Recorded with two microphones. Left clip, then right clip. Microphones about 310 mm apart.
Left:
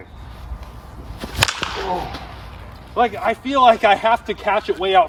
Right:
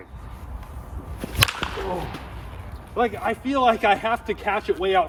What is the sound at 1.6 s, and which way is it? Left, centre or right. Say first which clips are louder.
Whip: left 4 dB; centre.